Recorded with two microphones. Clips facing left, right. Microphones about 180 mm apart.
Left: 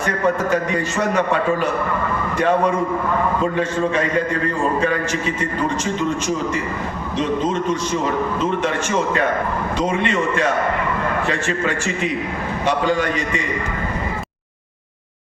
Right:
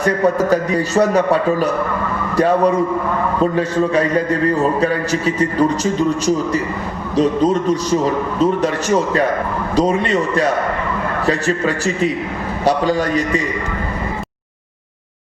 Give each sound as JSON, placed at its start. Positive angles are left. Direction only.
{"t": 0.0, "sound": "a man's voice", "side_deg": -35}
{"t": 9.7, "sound": "a man's voice", "side_deg": -35}